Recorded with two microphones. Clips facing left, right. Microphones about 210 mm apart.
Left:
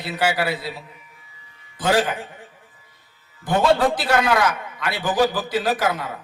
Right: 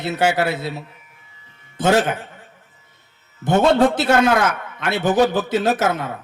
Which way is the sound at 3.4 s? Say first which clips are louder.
Right 3 dB; 25° right (ahead or behind).